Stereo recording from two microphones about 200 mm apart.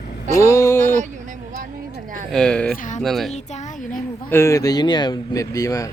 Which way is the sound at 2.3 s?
5° left (ahead or behind).